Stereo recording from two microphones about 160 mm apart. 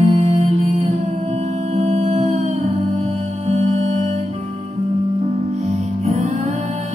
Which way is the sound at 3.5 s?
45° right (ahead or behind).